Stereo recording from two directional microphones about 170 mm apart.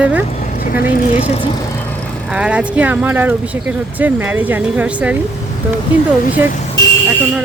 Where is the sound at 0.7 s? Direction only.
55° left (ahead or behind).